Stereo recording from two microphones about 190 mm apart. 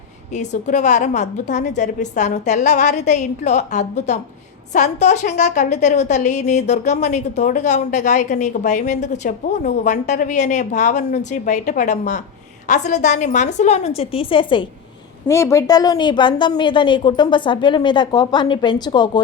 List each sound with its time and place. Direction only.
0.3 s a woman's voice: 40° left (ahead or behind)
15.3 s a woman's voice: 15° left (ahead or behind)